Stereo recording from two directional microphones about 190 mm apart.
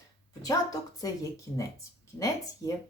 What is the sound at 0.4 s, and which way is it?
Speech, 20° left (ahead or behind).